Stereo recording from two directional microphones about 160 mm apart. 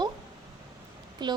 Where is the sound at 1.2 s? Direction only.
30° right (ahead or behind).